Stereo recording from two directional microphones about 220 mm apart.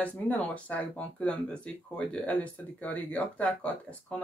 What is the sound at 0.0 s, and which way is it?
Speech, 5° left (ahead or behind).